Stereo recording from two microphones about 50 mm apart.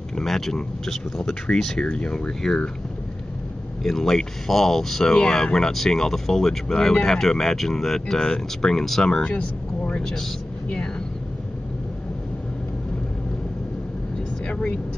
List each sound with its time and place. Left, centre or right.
0.1 s speech: centre
3.8 s speech: centre
9.2 s speech: left
14.4 s vehicle: left